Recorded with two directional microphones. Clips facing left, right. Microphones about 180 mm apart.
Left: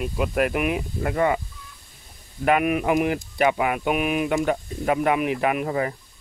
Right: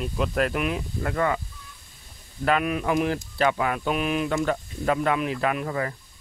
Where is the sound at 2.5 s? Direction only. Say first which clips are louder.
Left 3 dB; 15° left (ahead or behind).